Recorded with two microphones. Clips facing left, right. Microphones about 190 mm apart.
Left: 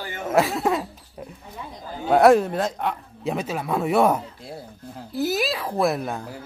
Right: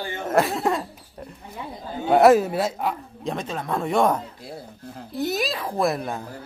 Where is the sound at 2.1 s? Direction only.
Centre (ahead or behind).